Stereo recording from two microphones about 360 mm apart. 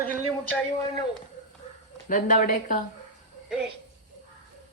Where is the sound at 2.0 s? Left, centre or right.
Left.